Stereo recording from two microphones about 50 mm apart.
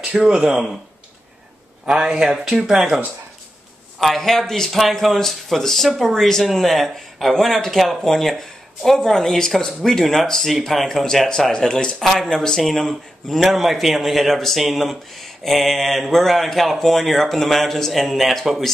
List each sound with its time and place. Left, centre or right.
0.1 s a man's voice: centre
1.9 s a man's voice: centre
4.0 s a man's voice: centre